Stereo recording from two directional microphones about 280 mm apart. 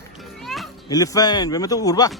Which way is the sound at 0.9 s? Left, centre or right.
Centre.